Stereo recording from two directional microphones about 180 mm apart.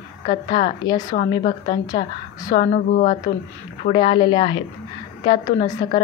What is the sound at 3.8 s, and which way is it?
A woman's voice, 30° left (ahead or behind).